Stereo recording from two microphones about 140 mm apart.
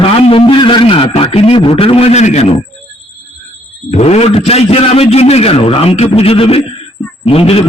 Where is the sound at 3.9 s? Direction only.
50° left (ahead or behind).